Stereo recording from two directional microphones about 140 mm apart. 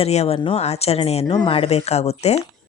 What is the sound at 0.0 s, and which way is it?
Speech, 50° left (ahead or behind).